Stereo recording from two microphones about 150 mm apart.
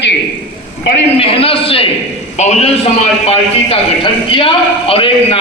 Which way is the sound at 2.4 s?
50° left (ahead or behind).